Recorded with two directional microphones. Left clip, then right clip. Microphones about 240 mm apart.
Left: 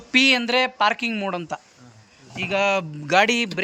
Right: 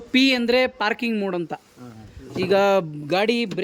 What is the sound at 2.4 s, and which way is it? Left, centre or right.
Speech, right.